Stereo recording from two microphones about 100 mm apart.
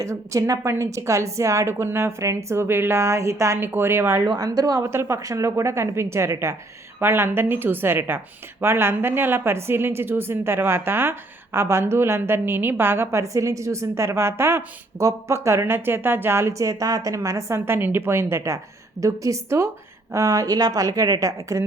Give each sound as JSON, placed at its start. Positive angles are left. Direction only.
{"t": 0.0, "sound": "a woman's voice", "side_deg": -35}
{"t": 4.9, "sound": "a woman's voice", "side_deg": -25}